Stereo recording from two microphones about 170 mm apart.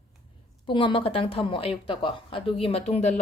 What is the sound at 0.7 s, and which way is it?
A woman's voice, 30° left (ahead or behind).